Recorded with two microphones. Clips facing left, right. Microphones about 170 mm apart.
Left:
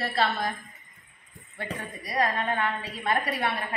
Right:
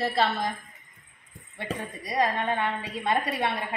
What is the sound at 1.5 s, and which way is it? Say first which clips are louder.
A woman's voice: right 2 dB; 20° right (ahead or behind).